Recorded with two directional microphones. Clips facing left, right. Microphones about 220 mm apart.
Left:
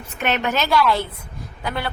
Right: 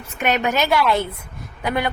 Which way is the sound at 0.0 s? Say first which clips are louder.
Right 2 dB; 10° right (ahead or behind).